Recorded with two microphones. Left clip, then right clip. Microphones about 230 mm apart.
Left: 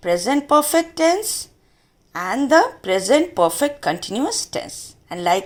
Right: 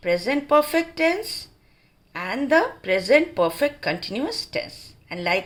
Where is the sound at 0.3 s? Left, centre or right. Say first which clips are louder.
Left 3 dB; centre.